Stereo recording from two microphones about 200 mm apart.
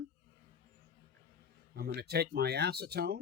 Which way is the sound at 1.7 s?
55° right (ahead or behind).